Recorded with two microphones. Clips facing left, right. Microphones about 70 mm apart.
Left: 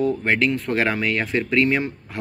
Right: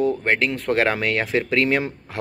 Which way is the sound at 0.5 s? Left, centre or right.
Right.